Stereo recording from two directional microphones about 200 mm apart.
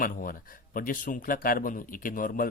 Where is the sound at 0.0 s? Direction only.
45° left (ahead or behind).